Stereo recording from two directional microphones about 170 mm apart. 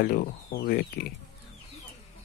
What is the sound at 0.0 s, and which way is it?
Speech, 60° left (ahead or behind).